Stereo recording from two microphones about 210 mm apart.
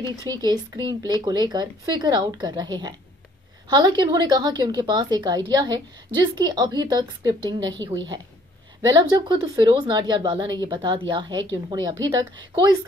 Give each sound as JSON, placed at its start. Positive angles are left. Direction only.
{"t": 0.3, "sound": "a woman's voice", "side_deg": -20}
{"t": 8.8, "sound": "a woman's voice", "side_deg": -20}